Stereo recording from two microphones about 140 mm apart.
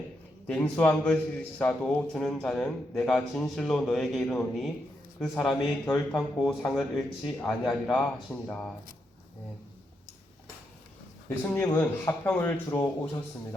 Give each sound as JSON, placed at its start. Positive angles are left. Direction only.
{"t": 0.4, "sound": "a man's voice", "side_deg": 10}
{"t": 11.5, "sound": "speech", "side_deg": 15}